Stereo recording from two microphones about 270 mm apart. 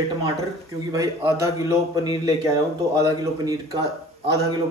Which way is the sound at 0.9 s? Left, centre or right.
Centre.